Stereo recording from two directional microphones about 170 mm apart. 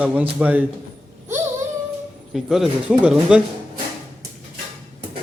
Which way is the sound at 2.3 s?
Centre (ahead or behind).